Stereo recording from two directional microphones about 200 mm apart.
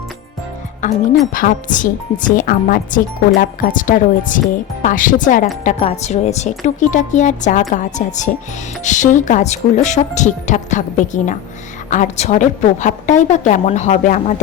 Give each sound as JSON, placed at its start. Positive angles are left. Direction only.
{"t": 0.8, "sound": "speech", "side_deg": 40}